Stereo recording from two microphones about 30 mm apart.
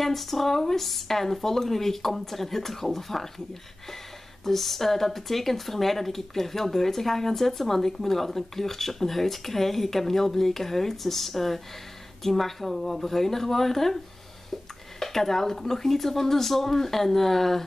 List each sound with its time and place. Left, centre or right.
0.0 s speech: centre
4.5 s speech: centre
15.0 s speech: centre